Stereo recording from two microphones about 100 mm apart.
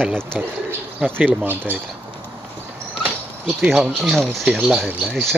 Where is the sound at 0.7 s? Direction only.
20° right (ahead or behind).